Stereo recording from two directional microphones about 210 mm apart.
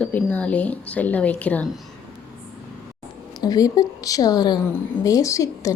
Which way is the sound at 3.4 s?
20° left (ahead or behind).